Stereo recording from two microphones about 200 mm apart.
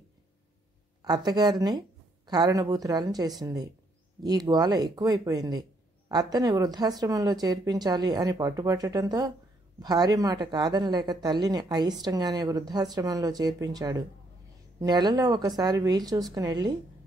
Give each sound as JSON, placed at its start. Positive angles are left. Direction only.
{"t": 1.0, "sound": "speech", "side_deg": -20}